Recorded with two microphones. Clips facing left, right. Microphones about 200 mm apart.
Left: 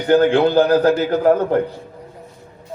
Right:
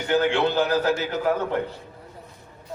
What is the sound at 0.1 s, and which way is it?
A man's voice, 50° left (ahead or behind).